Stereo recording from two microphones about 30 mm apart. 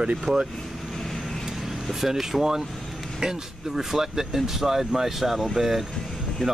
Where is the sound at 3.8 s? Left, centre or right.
Centre.